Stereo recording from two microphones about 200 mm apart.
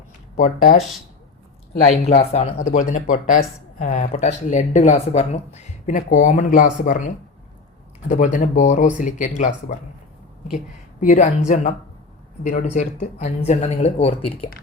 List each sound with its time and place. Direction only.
0.3 s speech: 40° left (ahead or behind)
1.8 s speech: 30° left (ahead or behind)
8.1 s speech: 40° left (ahead or behind)
11.0 s speech: 35° left (ahead or behind)